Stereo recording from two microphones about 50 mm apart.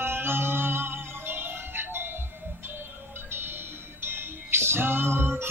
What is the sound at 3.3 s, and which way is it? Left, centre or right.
Music, right.